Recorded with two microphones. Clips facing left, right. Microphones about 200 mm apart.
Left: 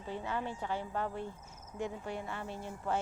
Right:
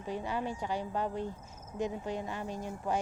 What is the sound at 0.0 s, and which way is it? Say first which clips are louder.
A woman's voice: right 3 dB; 15° right (ahead or behind).